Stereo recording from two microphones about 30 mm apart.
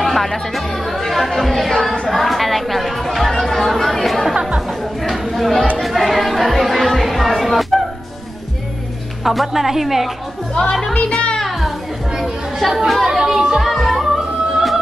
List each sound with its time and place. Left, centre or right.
0.0 s speech: centre
2.0 s chatter: centre
5.8 s music: centre
9.2 s speech: centre
10.5 s speech: centre
11.4 s children playing: centre
12.2 s chatter: centre
13.2 s speech: centre
13.6 s music: centre